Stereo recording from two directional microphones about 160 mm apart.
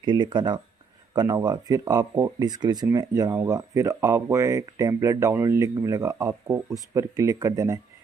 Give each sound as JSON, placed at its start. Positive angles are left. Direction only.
{"t": 0.0, "sound": "speech", "side_deg": -30}